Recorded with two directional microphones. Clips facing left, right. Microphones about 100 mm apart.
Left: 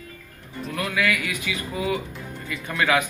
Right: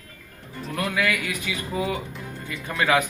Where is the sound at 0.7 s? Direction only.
35° right (ahead or behind).